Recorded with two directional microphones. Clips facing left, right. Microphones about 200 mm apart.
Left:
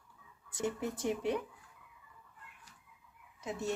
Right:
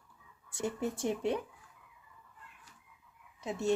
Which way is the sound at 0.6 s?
30° right (ahead or behind).